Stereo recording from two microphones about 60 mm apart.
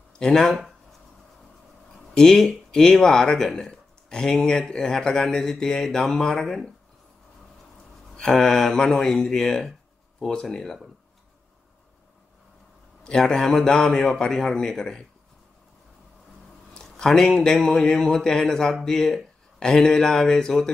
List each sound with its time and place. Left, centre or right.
0.2 s speech: centre
2.1 s speech: centre
8.2 s speech: centre
13.0 s speech: centre
16.8 s speech: centre